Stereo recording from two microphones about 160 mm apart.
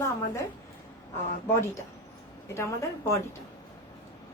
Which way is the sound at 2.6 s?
20° left (ahead or behind).